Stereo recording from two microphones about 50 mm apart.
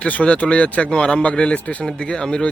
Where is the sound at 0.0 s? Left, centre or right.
Left.